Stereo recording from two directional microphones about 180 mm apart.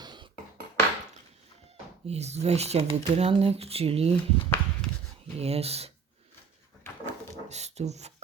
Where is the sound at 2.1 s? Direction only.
35° right (ahead or behind).